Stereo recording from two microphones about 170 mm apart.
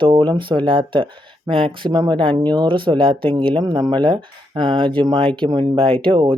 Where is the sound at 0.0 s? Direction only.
30° right (ahead or behind).